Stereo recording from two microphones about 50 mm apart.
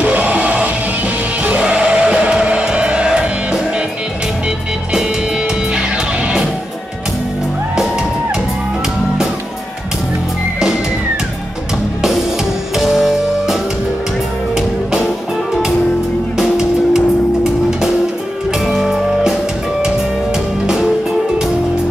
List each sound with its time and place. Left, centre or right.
0.0 s music: right
5.7 s music: centre
12.7 s music: centre
16.3 s music: centre
20.6 s music: centre